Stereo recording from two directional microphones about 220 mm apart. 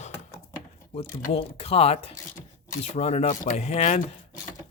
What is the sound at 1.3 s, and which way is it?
Speech, 25° left (ahead or behind).